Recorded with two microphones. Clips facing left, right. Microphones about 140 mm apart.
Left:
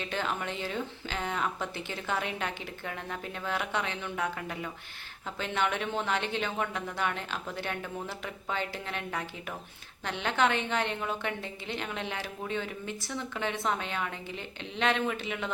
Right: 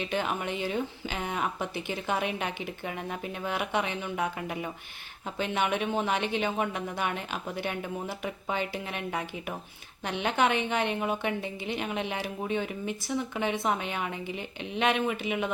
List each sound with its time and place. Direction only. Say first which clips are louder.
0.0 s speech: right 3 dB; 15° right (ahead or behind)